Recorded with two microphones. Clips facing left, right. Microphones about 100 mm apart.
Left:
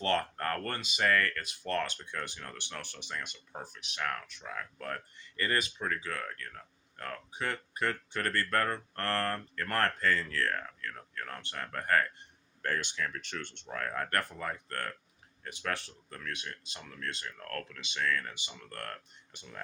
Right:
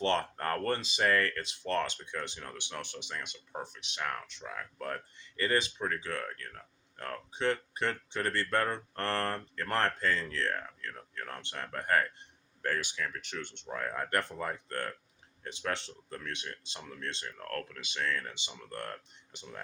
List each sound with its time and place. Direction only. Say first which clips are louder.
0.0 s speech: right 1 dB; 25° right (ahead or behind)
12.6 s speech: even; 10° right (ahead or behind)